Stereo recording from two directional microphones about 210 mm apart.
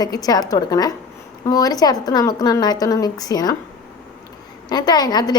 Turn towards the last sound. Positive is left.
turn(degrees=20)  # may be behind; listen again after turning